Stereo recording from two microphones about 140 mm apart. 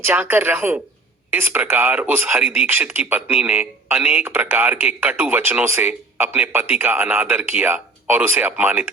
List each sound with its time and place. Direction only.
0.0 s a man's voice: 15° right (ahead or behind)